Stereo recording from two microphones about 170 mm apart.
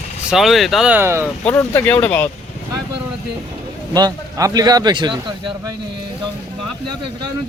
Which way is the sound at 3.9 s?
20° right (ahead or behind).